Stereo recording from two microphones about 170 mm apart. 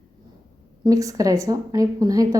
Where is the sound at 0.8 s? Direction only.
20° right (ahead or behind).